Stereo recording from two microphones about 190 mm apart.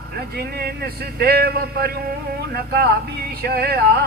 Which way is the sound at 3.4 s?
55° right (ahead or behind).